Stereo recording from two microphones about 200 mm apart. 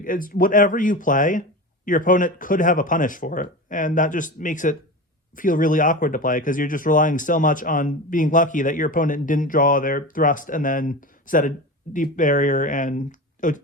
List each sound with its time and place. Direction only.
0.0 s speech: 45° left (ahead or behind)